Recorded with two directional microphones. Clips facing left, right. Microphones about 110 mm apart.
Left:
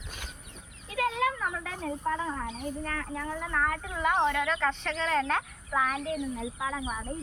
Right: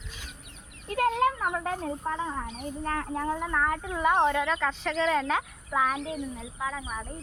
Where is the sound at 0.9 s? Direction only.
50° right (ahead or behind).